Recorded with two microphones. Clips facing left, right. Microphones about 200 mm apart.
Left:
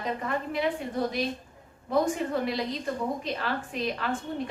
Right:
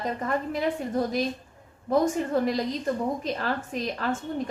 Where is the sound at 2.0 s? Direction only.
45° right (ahead or behind).